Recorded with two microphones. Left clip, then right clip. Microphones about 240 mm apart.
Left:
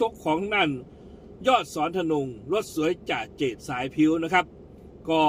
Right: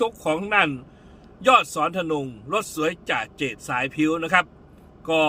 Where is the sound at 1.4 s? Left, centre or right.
Centre.